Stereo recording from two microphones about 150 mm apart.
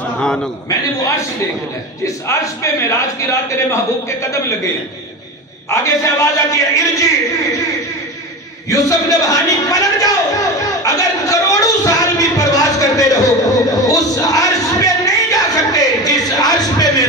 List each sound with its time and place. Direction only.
0.7 s a man's voice: 20° left (ahead or behind)
5.7 s a man's voice: 20° left (ahead or behind)
8.6 s a sound: 20° left (ahead or behind)